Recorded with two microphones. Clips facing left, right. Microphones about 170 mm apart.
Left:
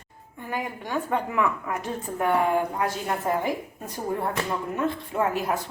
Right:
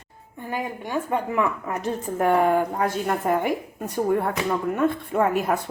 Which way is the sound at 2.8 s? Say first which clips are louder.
Right 3 dB; 55° right (ahead or behind).